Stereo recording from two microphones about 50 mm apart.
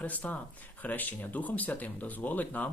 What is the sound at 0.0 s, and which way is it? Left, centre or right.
Speech, left.